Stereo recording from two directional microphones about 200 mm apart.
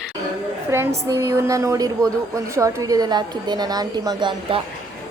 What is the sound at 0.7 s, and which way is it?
A woman's voice, 15° right (ahead or behind).